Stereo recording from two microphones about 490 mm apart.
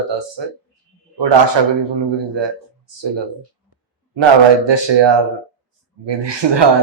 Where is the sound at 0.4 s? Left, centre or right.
Right.